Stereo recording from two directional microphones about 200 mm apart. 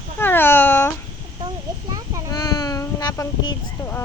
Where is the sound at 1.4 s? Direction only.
20° right (ahead or behind).